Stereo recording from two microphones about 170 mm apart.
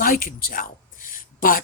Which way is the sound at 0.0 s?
55° left (ahead or behind).